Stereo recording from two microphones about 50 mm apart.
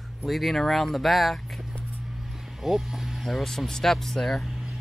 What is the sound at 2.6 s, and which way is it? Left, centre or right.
Speech, centre.